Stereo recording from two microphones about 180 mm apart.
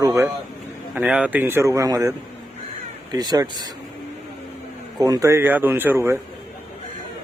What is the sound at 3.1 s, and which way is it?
Speech, 20° right (ahead or behind).